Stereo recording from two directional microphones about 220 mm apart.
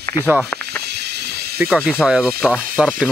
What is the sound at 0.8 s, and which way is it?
Snake, 50° right (ahead or behind).